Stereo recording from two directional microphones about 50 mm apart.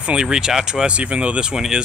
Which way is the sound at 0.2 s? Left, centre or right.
Centre.